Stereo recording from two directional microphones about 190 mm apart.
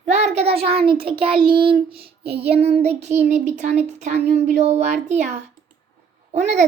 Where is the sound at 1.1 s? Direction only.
25° right (ahead or behind).